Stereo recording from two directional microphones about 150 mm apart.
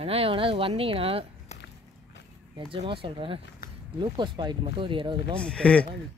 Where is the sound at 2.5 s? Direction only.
35° right (ahead or behind).